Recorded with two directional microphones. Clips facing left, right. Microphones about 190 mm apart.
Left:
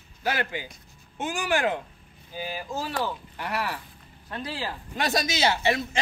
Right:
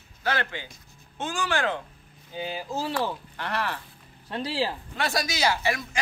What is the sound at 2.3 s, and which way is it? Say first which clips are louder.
Speech: right 1 dB; 20° right (ahead or behind).